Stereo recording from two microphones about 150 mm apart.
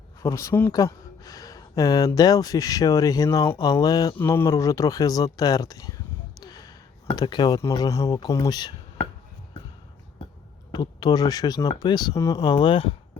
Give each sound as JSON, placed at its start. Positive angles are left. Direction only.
{"t": 0.2, "sound": "speech", "side_deg": 20}
{"t": 6.4, "sound": "a sound", "side_deg": 25}
{"t": 7.2, "sound": "speech", "side_deg": 25}
{"t": 10.7, "sound": "speech", "side_deg": 30}
{"t": 12.4, "sound": "speech", "side_deg": 30}